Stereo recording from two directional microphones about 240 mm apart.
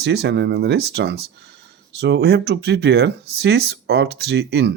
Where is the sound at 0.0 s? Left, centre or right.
Right.